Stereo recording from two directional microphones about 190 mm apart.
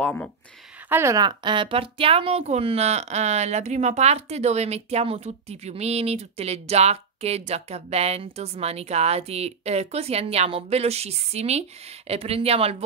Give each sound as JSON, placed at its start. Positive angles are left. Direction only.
{"t": 0.0, "sound": "speech", "side_deg": 5}
{"t": 0.8, "sound": "a woman's voice", "side_deg": -15}